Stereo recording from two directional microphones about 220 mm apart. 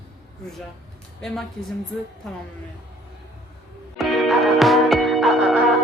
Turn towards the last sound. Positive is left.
turn(degrees=0)  # may be behind; listen again after turning